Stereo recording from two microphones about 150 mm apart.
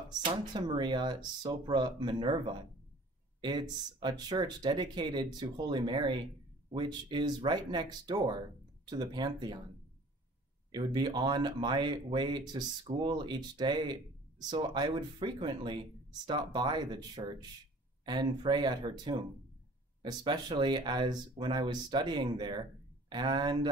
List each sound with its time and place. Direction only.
0.3 s speech: 30° right (ahead or behind)
10.7 s speech: 30° right (ahead or behind)